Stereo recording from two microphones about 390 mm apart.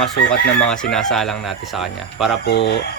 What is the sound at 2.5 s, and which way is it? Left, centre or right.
Speech, left.